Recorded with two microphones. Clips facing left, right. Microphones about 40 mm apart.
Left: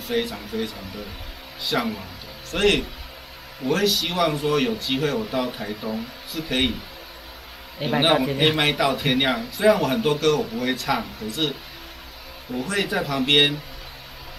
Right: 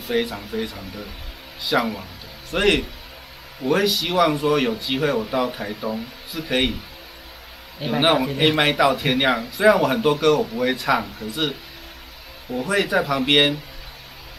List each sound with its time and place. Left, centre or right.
0.1 s speech: centre
8.0 s a man's voice: centre